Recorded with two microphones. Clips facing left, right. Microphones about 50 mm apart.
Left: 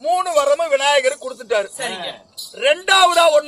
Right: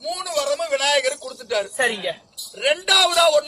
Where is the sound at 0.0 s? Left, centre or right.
Left.